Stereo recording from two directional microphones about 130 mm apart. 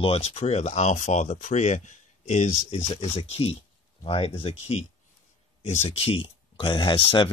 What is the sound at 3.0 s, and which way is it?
Speech, 45° left (ahead or behind).